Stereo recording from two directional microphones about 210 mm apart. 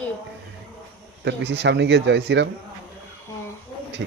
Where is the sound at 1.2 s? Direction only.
55° right (ahead or behind).